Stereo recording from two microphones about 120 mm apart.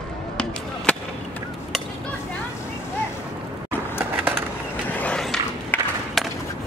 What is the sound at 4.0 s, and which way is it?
Skateboard, 20° right (ahead or behind).